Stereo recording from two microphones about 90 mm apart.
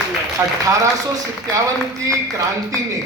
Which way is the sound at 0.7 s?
40° right (ahead or behind).